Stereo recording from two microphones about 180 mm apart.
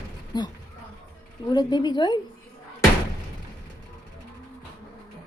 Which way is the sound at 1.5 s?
25° left (ahead or behind).